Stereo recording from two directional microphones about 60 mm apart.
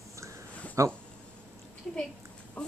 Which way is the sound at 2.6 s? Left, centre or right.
Centre.